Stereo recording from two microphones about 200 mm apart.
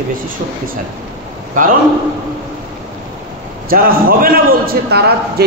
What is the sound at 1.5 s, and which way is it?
Speech, 40° right (ahead or behind).